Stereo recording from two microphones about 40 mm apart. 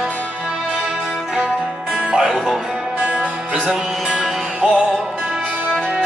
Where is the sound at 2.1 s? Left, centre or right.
Centre.